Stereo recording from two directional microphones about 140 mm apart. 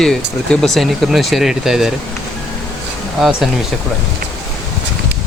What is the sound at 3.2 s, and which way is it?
Speech, 5° right (ahead or behind).